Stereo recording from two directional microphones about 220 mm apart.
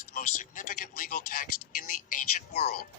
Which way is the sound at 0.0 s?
35° left (ahead or behind).